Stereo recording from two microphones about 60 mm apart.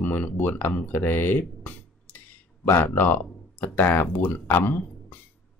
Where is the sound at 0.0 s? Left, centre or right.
Left.